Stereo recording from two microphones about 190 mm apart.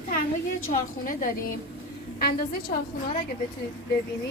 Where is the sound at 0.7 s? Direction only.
45° left (ahead or behind).